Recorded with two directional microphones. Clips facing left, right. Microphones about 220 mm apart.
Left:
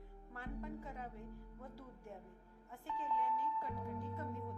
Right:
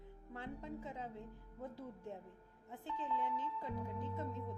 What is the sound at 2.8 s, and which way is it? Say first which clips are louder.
Speech: even; 25° right (ahead or behind).